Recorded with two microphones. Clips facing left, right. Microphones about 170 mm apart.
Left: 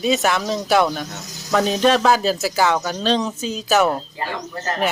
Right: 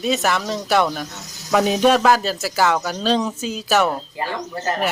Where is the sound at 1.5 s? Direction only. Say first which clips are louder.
Right 1 dB; 10° right (ahead or behind).